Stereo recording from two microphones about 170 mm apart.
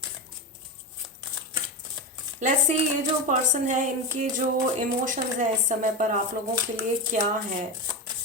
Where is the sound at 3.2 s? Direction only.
50° right (ahead or behind).